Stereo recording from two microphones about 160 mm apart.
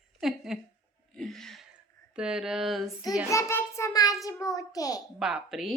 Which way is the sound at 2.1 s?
5° right (ahead or behind).